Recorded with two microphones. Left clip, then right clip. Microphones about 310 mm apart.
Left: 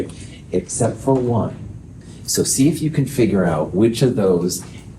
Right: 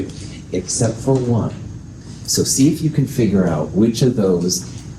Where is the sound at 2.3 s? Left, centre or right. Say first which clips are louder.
Right 1 dB; left.